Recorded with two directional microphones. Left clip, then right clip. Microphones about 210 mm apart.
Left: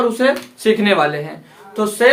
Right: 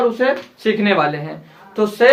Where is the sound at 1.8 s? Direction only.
10° right (ahead or behind).